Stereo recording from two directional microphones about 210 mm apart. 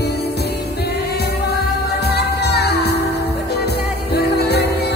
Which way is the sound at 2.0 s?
50° left (ahead or behind).